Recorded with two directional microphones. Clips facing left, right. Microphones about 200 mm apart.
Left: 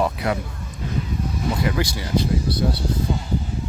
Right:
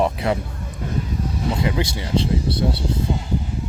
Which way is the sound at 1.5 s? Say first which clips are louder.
Even; 25° right (ahead or behind).